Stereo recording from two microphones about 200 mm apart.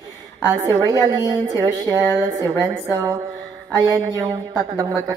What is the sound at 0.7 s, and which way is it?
Speech, 15° left (ahead or behind).